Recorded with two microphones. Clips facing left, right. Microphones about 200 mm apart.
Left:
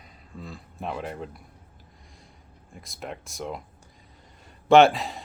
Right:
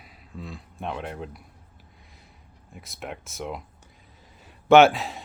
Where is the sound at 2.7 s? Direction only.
Centre (ahead or behind).